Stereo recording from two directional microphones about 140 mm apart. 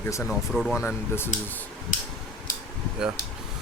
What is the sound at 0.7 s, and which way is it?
Speech, 15° left (ahead or behind).